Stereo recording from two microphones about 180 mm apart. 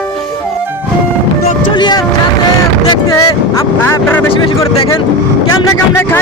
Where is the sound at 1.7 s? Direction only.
25° left (ahead or behind).